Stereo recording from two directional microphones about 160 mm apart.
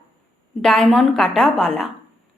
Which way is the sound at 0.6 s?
5° left (ahead or behind).